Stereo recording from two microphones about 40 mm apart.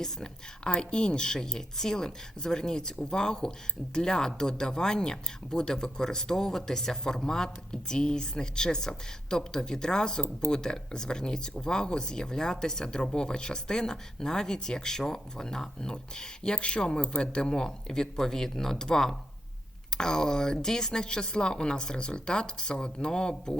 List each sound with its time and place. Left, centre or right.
0.0 s speech: left